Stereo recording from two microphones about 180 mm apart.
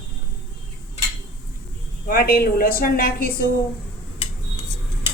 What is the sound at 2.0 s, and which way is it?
A woman's voice, 55° left (ahead or behind).